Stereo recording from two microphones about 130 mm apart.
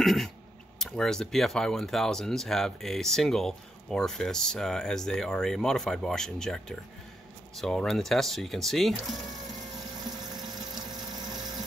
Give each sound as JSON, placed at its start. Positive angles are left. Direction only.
{"t": 0.0, "sound": "speech", "side_deg": 0}
{"t": 10.7, "sound": "engine", "side_deg": -30}